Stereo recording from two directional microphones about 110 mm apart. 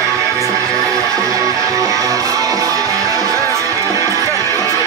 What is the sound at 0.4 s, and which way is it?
Music, 30° right (ahead or behind).